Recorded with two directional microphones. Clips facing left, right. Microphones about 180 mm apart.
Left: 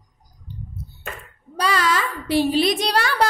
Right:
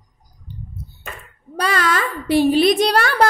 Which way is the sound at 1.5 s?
55° right (ahead or behind).